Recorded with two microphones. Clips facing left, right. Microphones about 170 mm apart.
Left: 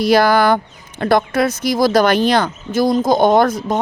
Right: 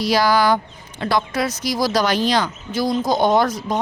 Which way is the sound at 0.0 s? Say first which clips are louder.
Left 4 dB; 55° left (ahead or behind).